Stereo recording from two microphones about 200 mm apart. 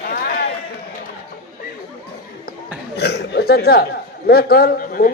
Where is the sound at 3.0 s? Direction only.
55° left (ahead or behind).